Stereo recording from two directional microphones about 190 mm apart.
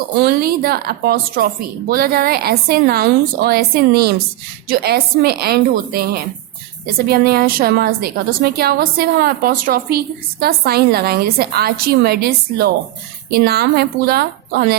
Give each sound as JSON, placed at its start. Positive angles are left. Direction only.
{"t": 0.3, "sound": "a woman's voice", "side_deg": -55}